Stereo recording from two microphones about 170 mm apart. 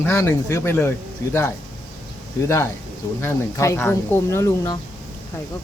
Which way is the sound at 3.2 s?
15° left (ahead or behind).